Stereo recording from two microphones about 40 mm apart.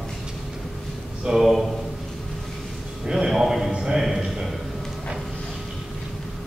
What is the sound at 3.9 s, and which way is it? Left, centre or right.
Music, centre.